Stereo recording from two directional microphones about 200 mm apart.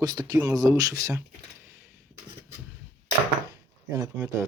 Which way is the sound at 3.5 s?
15° right (ahead or behind).